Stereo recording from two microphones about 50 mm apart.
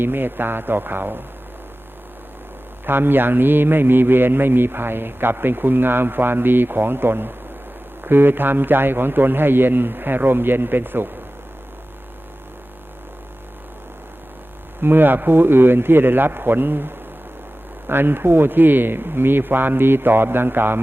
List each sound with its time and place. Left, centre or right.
0.0 s a man's voice: right
2.8 s a man's voice: right
14.8 s a man's voice: right